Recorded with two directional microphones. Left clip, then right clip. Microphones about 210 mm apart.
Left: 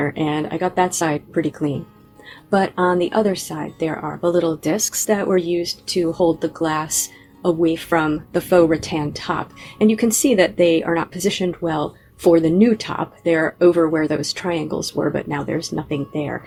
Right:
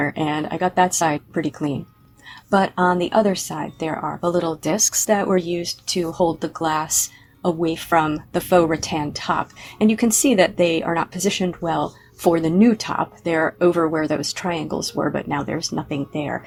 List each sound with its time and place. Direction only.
0.0 s speech: 35° right (ahead or behind)